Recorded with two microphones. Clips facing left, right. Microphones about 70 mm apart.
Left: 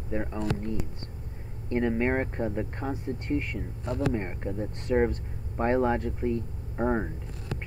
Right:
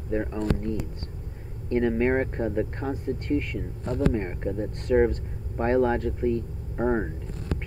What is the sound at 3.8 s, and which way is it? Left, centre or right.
Speech, right.